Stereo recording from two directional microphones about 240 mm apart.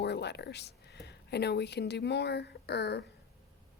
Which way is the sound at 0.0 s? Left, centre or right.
Left.